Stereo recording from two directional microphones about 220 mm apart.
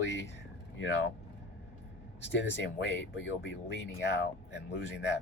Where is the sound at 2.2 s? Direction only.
50° left (ahead or behind).